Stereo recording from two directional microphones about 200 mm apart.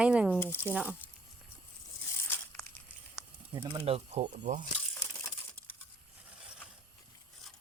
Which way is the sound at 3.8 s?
30° right (ahead or behind).